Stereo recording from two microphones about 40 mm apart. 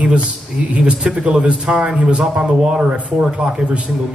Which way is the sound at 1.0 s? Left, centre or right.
Right.